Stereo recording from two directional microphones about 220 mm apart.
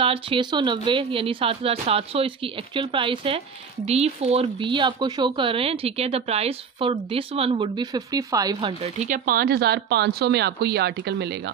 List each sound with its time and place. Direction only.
0.0 s speech: 25° right (ahead or behind)
8.6 s speech: 30° right (ahead or behind); by 11.2 s 50° right (ahead or behind)